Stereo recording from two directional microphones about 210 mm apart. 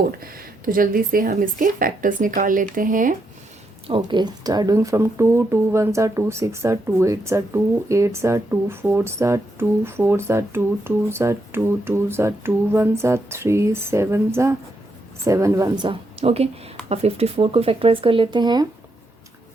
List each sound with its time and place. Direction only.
0.2 s speech: 45° right (ahead or behind)
3.8 s speech: 25° right (ahead or behind)